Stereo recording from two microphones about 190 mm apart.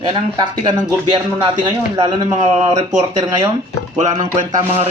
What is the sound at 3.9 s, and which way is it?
Speech, 40° right (ahead or behind).